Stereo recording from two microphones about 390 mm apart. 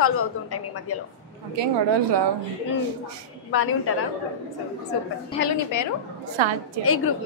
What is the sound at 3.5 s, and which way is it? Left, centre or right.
Speech, left.